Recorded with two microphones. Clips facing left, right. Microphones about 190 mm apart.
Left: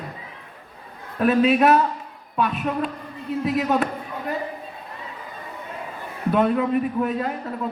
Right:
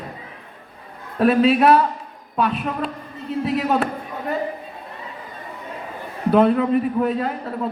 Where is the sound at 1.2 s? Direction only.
35° right (ahead or behind).